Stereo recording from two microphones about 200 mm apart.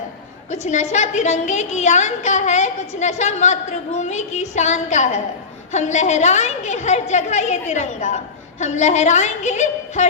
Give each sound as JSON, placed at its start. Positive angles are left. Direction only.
{"t": 0.5, "sound": "a woman's voice", "side_deg": 35}